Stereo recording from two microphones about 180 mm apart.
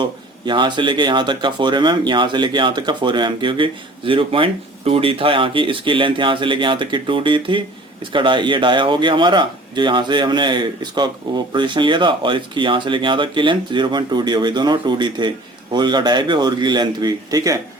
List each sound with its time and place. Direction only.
0.0 s speech: 25° right (ahead or behind)